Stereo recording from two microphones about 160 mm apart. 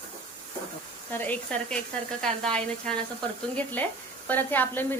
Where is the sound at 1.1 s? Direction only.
10° left (ahead or behind).